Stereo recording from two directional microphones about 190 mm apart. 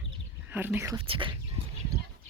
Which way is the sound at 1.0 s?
25° right (ahead or behind).